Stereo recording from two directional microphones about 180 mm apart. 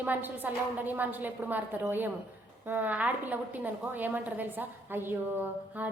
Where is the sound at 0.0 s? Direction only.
10° right (ahead or behind).